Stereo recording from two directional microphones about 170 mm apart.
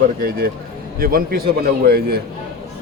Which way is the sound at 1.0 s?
60° right (ahead or behind).